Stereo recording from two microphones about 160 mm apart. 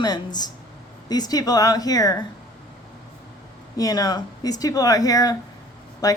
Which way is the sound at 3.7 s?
20° left (ahead or behind).